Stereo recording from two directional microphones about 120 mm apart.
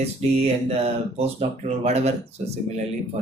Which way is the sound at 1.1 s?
65° right (ahead or behind).